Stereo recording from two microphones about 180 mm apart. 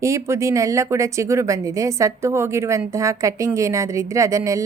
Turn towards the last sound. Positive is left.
turn(degrees=-15)  # may be behind; listen again after turning